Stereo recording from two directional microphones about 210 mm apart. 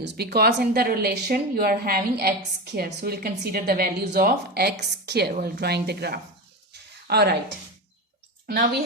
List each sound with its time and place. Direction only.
0.0 s speech: 50° right (ahead or behind)